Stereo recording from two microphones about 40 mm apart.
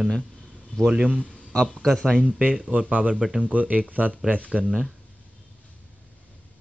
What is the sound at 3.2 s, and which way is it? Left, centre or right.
Speech, centre.